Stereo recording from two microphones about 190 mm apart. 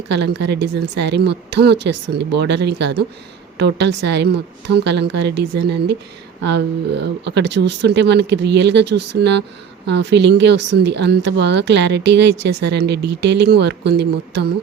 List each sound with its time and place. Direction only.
0.1 s speech: 65° right (ahead or behind)